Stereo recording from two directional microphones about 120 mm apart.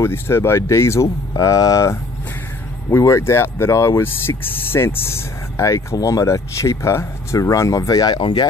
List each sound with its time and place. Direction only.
0.0 s speech: 20° left (ahead or behind)
8.2 s speech: 45° left (ahead or behind)